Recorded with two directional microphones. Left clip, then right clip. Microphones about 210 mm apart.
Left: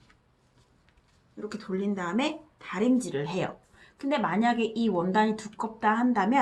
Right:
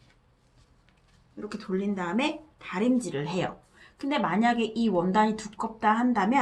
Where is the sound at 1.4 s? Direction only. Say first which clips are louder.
Right 1 dB; 5° left (ahead or behind).